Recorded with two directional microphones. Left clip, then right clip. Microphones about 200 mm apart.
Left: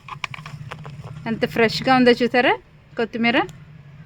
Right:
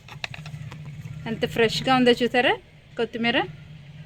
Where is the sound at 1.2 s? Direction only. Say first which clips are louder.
Left 3 dB; 55° left (ahead or behind).